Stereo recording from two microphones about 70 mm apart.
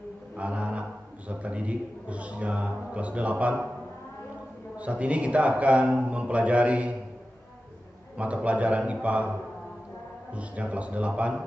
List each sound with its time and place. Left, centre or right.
0.4 s a man's voice: centre
4.7 s a man's voice: centre
8.2 s a man's voice: centre
10.3 s a man's voice: centre